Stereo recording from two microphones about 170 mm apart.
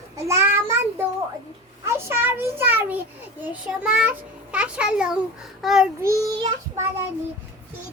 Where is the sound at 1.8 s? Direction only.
15° right (ahead or behind).